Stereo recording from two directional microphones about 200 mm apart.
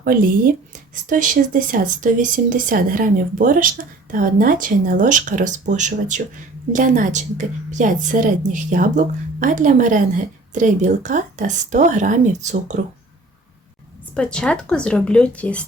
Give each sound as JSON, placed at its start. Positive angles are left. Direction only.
{"t": 0.0, "sound": "a woman's voice", "side_deg": -45}
{"t": 14.1, "sound": "a woman's voice", "side_deg": 5}